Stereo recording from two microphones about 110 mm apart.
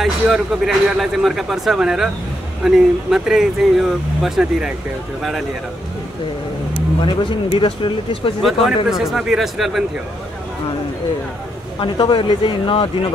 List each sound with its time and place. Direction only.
0.0 s speech: centre (ahead or behind)
7.0 s speech: 50° left (ahead or behind)
8.4 s speech: centre (ahead or behind)
11.8 s speech: 50° left (ahead or behind)